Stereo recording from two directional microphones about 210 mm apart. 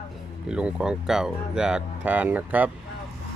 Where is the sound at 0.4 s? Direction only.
5° right (ahead or behind).